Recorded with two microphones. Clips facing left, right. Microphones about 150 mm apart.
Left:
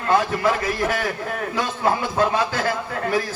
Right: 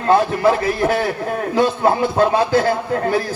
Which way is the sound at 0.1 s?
35° right (ahead or behind).